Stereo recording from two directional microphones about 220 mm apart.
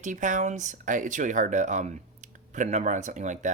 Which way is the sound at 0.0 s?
35° right (ahead or behind).